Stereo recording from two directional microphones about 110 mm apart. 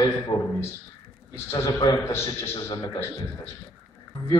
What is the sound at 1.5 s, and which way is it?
Speech, 35° left (ahead or behind).